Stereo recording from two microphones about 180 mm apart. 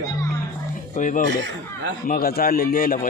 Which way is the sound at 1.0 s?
45° left (ahead or behind).